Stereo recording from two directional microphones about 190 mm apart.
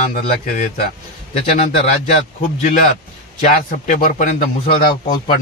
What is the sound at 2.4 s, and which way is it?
Speech, 40° left (ahead or behind).